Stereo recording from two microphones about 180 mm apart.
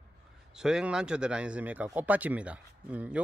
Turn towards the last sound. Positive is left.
turn(degrees=-5)  # may be behind; listen again after turning